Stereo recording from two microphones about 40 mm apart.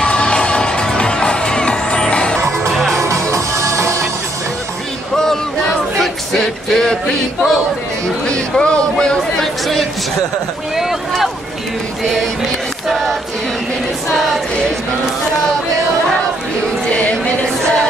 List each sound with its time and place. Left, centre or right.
0.0 s music: left
2.7 s music: centre
5.1 s a sound: centre
6.4 s male singing: centre
8.3 s speech: left
12.0 s male singing: centre